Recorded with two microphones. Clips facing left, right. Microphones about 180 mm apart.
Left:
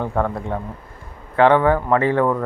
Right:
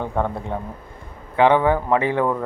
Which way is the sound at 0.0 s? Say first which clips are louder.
Left 2 dB; centre (ahead or behind).